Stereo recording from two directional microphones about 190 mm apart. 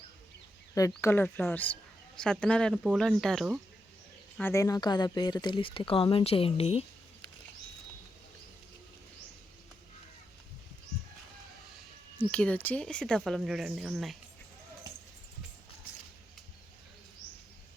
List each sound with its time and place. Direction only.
0.7 s speech: 15° left (ahead or behind); by 3.6 s centre (ahead or behind)
4.4 s speech: 15° left (ahead or behind); by 6.8 s 30° left (ahead or behind)
12.3 s speech: 5° left (ahead or behind)